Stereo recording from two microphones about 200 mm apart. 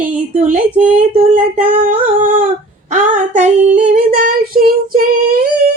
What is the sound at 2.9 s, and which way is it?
Female singing, 35° right (ahead or behind).